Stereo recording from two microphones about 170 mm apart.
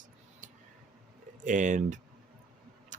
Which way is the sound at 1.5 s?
50° right (ahead or behind).